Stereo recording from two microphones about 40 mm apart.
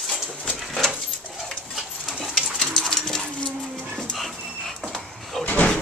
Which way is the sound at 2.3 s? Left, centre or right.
Left.